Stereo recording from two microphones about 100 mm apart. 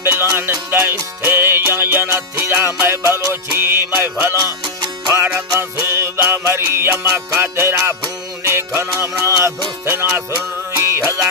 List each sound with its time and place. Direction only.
0.0 s music: 25° right (ahead or behind)
4.4 s music: 35° right (ahead or behind)
5.0 s music: 20° right (ahead or behind)